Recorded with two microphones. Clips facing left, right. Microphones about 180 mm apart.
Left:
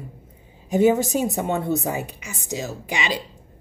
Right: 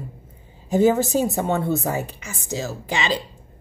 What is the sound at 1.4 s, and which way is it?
A woman's voice, 15° left (ahead or behind).